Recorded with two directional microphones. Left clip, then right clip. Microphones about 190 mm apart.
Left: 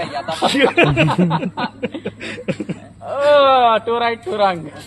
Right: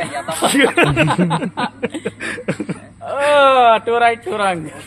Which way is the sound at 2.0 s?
35° right (ahead or behind).